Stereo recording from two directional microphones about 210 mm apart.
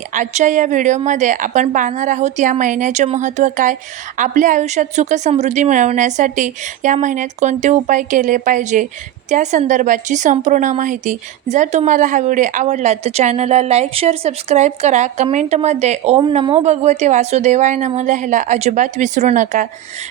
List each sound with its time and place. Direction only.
0.1 s speech: 35° right (ahead or behind)